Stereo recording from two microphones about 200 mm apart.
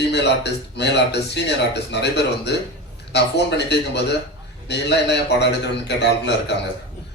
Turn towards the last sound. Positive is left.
turn(degrees=60)  # may be behind; listen again after turning